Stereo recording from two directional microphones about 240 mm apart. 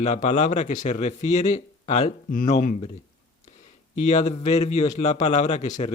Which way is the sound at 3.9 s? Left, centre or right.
Left.